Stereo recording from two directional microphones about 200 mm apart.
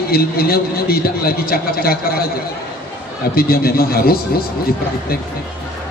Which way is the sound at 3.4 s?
50° left (ahead or behind).